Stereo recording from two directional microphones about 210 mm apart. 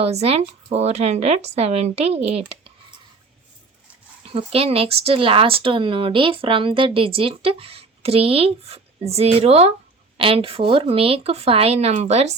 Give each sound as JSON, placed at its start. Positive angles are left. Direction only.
{"t": 0.0, "sound": "speech", "side_deg": -30}
{"t": 4.3, "sound": "speech", "side_deg": -25}